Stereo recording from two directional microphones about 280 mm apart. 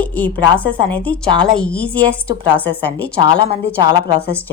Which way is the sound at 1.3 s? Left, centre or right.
Centre.